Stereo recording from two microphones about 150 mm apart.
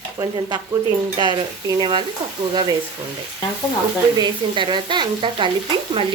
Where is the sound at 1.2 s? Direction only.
30° right (ahead or behind).